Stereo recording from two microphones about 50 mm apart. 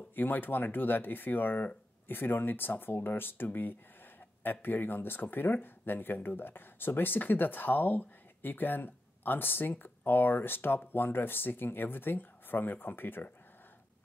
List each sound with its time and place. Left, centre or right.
0.1 s speech: left